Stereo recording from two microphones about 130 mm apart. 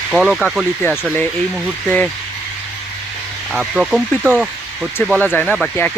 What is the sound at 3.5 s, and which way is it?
Speech, 5° right (ahead or behind).